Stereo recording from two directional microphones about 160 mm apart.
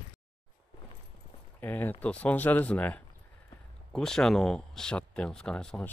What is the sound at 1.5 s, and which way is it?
Speech, 10° left (ahead or behind).